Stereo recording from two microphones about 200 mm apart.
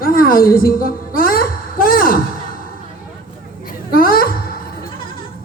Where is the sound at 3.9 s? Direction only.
45° left (ahead or behind).